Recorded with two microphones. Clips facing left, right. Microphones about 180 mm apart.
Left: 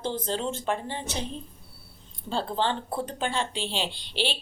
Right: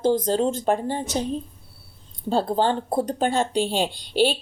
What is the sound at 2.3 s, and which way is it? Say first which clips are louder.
Speech: right 6 dB; 45° right (ahead or behind).